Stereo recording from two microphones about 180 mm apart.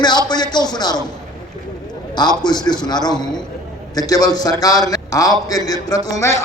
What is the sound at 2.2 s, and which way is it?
A man's voice, 25° left (ahead or behind).